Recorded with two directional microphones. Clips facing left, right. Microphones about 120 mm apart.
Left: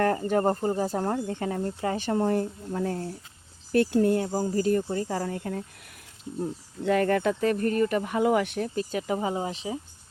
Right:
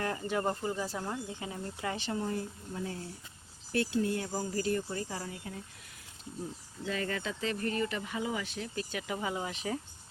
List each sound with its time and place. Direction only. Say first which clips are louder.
0.0 s speech: left 9 dB; 45° left (ahead or behind)
1.8 s speech: left 8 dB; 40° left (ahead or behind)
4.2 s speech: left 8 dB; 30° left (ahead or behind); by 8.7 s 60° left (ahead or behind)
8.7 s speech: left 8 dB; 40° left (ahead or behind)